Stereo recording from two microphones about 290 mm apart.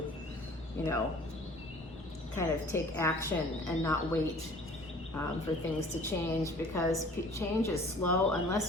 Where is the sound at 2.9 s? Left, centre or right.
Centre.